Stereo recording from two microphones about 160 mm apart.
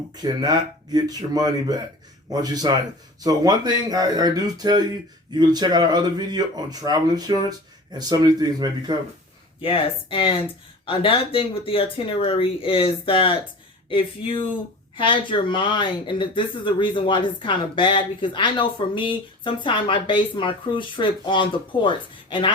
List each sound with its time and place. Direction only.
0.2 s speech: 25° right (ahead or behind)
9.6 s speech: 35° left (ahead or behind)